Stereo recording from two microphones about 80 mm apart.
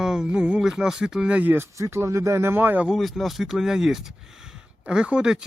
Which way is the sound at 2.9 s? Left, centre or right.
Centre.